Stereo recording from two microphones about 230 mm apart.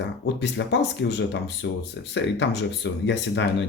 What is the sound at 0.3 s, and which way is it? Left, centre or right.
Speech, left.